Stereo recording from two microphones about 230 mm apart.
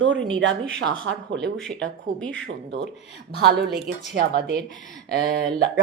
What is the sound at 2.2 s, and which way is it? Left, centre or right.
Speech, centre.